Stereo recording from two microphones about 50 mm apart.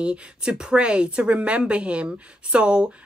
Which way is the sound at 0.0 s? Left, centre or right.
Centre.